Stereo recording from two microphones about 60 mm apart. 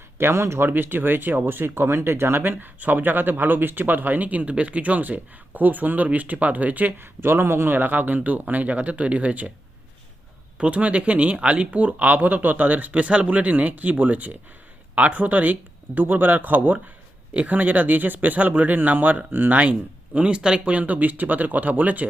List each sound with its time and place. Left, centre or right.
0.2 s speech: right
0.7 s speech: right
10.6 s speech: right